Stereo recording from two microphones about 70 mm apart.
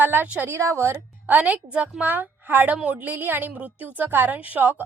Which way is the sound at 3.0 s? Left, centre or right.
Right.